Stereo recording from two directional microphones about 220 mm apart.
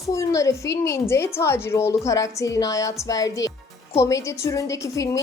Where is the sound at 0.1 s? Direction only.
15° left (ahead or behind).